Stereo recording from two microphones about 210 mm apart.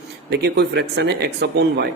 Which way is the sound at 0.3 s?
50° right (ahead or behind).